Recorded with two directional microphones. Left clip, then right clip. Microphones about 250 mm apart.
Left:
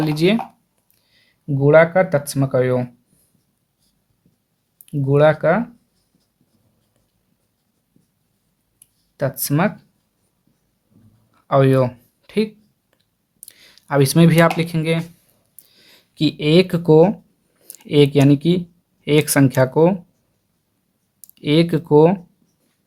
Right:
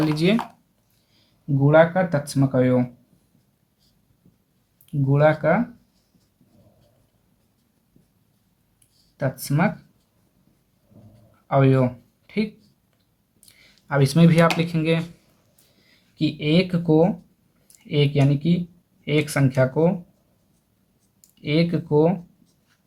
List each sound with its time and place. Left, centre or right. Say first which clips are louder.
0.0 s speech: left 3 dB; left
1.6 s speech: left 4 dB; left
4.9 s speech: left 4 dB; left
9.1 s speech: left 4 dB; left
11.4 s a sound: left 4 dB; left
13.4 s speech: left 6 dB; left
21.3 s speech: left 6 dB; left